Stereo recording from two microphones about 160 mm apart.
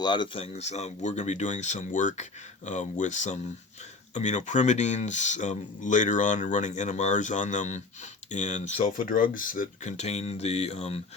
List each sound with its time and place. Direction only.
0.0 s speech: 30° left (ahead or behind)